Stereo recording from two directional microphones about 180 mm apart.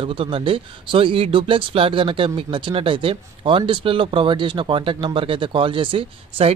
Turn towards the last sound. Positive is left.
turn(degrees=-30)  # may be behind; listen again after turning